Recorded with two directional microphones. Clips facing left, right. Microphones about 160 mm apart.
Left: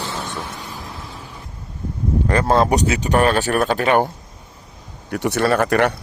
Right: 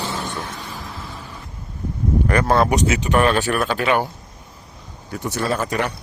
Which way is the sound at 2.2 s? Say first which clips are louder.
Left 1 dB; 25° left (ahead or behind).